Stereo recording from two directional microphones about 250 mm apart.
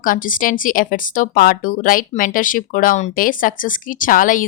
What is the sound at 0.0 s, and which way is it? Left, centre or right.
Speech, left.